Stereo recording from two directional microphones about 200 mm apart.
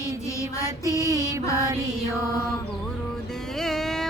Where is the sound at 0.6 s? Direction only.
15° left (ahead or behind).